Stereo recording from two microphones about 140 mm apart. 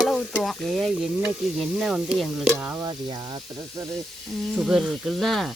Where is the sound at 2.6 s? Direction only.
15° right (ahead or behind).